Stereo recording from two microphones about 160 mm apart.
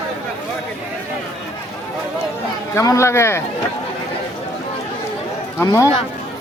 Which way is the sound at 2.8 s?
20° left (ahead or behind).